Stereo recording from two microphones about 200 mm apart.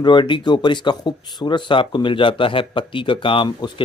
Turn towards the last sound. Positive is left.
turn(degrees=25)  # may be behind; listen again after turning